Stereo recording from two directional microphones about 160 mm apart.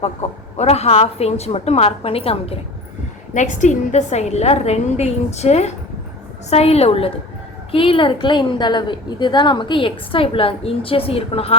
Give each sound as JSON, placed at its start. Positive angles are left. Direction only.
{"t": 0.0, "sound": "a woman's voice", "side_deg": 40}
{"t": 3.3, "sound": "a woman's voice", "side_deg": 50}